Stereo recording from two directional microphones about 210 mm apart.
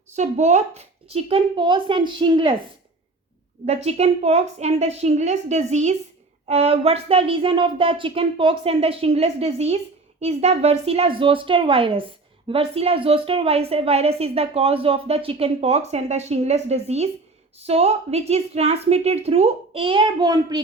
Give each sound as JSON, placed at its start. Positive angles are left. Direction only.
{"t": 0.2, "sound": "speech", "side_deg": -30}
{"t": 3.7, "sound": "a woman's voice", "side_deg": -30}